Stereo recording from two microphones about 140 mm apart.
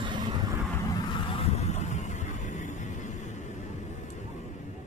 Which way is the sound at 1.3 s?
50° left (ahead or behind).